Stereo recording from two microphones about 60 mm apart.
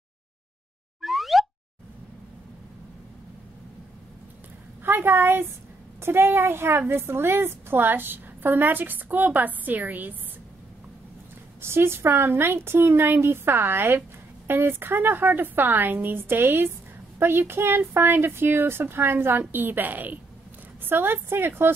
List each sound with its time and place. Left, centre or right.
1.0 s plop: centre
4.8 s a woman's voice: right
11.6 s a woman's voice: right